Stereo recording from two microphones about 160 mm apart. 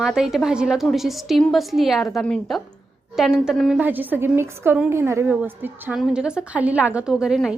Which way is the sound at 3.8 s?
10° right (ahead or behind).